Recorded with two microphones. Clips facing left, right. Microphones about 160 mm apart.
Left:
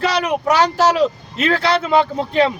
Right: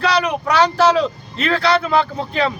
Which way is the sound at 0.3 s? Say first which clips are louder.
Left 1 dB; 15° left (ahead or behind).